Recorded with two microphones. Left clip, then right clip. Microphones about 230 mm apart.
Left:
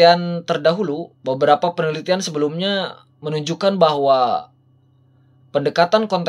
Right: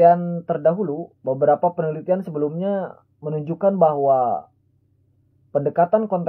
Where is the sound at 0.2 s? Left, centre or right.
Left.